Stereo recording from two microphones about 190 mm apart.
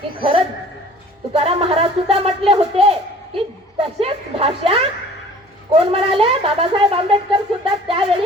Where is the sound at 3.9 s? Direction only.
30° right (ahead or behind).